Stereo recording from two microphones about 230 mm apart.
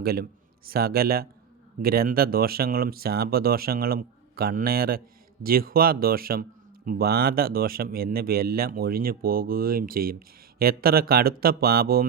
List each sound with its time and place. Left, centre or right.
0.0 s a man's voice: right